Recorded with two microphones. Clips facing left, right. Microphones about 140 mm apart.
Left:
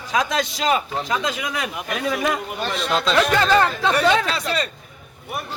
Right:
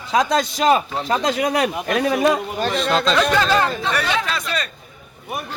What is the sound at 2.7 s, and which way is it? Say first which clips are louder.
Speech: right 2 dB; 5° left (ahead or behind).